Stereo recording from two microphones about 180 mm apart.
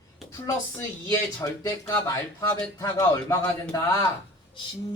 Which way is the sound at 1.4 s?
20° left (ahead or behind).